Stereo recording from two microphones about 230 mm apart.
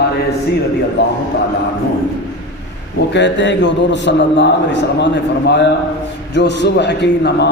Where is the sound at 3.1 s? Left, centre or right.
Left.